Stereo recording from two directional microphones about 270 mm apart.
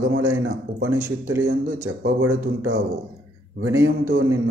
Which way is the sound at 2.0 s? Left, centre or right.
Right.